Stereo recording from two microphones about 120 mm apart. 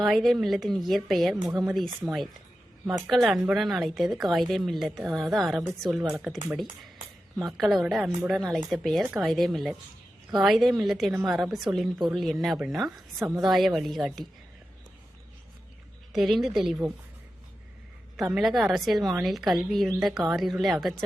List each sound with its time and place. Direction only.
0.0 s a woman's voice: centre (ahead or behind)
13.1 s a woman's voice: 20° right (ahead or behind)
13.4 s a woman's voice: centre (ahead or behind)
16.1 s a woman's voice: centre (ahead or behind)
18.2 s a woman's voice: centre (ahead or behind)